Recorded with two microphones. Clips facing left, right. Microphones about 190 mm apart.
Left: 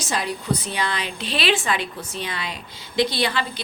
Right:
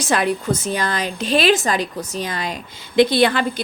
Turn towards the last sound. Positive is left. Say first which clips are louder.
# right 7 dB
turn(degrees=-55)  # may be behind; listen again after turning